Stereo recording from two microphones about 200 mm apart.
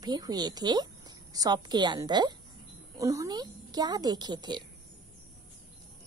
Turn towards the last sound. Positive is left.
turn(degrees=-20)  # may be behind; listen again after turning